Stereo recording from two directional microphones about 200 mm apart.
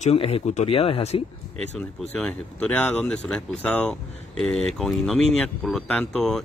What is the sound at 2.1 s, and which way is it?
Speech, 5° left (ahead or behind).